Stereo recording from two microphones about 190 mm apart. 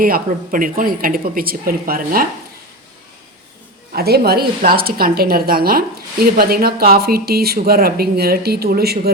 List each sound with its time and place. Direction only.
0.0 s speech: 45° right (ahead or behind)
3.9 s speech: 55° right (ahead or behind)